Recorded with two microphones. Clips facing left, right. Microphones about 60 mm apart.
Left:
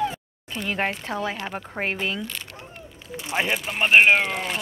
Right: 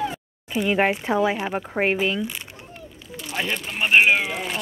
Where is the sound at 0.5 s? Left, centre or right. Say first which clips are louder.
Right 6 dB; centre.